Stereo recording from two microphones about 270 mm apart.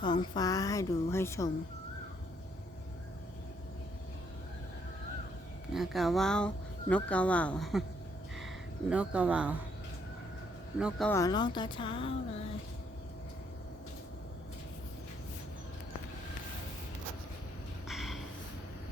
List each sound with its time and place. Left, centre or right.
0.0 s a woman's voice: centre
5.7 s speech: centre
8.9 s speech: centre
10.8 s a woman's voice: centre
17.8 s a sound: centre